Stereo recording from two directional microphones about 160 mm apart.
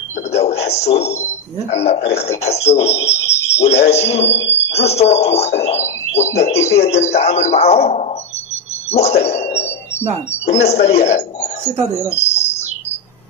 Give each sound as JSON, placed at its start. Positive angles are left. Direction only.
{"t": 0.3, "sound": "a sound", "side_deg": 40}
{"t": 1.7, "sound": "a man's voice", "side_deg": 40}
{"t": 5.6, "sound": "a sound", "side_deg": 45}
{"t": 6.3, "sound": "a man's voice", "side_deg": 40}
{"t": 10.5, "sound": "speech", "side_deg": 40}
{"t": 12.1, "sound": "bird", "side_deg": 40}